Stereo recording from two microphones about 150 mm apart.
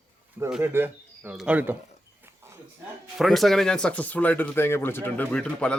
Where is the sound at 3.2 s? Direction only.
Centre (ahead or behind).